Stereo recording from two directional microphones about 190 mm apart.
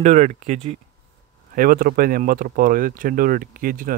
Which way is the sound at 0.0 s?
40° right (ahead or behind).